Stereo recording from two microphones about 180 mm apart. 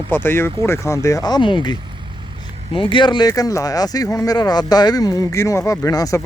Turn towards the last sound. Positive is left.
turn(degrees=20)  # may be behind; listen again after turning